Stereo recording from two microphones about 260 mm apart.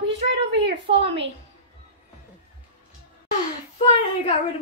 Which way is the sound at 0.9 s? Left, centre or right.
Right.